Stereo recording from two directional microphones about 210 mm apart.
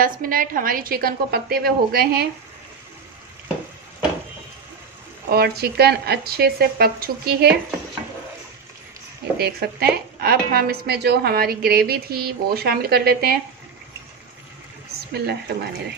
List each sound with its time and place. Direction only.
0.0 s a woman's voice: 40° right (ahead or behind)
5.3 s a woman's voice: 50° right (ahead or behind)
9.4 s a woman's voice: 45° right (ahead or behind)
15.1 s a woman's voice: 50° right (ahead or behind)